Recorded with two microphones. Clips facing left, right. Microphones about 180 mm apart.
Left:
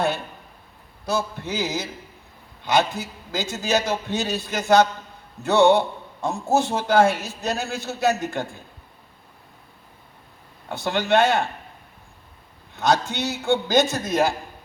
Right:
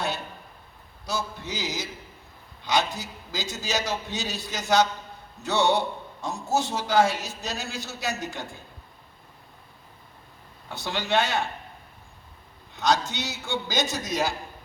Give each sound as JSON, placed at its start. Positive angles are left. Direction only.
{"t": 1.0, "sound": "a man's voice", "side_deg": 55}
{"t": 10.7, "sound": "a man's voice", "side_deg": 55}
{"t": 12.7, "sound": "a man's voice", "side_deg": 55}